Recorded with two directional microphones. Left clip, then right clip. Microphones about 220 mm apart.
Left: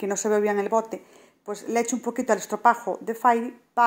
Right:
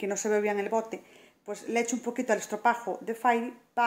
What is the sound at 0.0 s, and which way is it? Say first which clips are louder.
A woman's voice: left 4 dB; 20° left (ahead or behind).